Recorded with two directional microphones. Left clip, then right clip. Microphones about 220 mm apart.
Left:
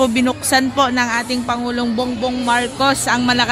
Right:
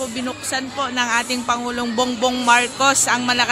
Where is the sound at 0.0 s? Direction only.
20° left (ahead or behind).